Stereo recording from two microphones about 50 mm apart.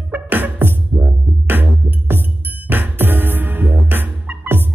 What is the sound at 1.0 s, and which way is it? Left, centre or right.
Music, right.